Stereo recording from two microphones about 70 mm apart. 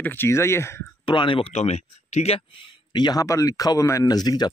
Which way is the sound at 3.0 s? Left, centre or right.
Left.